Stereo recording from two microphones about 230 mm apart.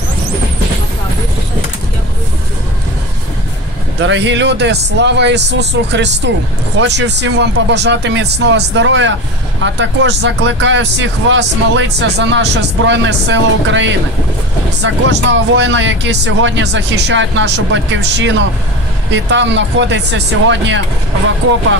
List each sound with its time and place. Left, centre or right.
4.0 s speech: right